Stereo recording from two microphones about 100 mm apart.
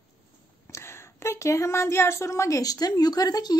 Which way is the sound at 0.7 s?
25° left (ahead or behind).